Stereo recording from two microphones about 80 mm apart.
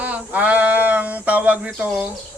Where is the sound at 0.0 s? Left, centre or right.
Centre.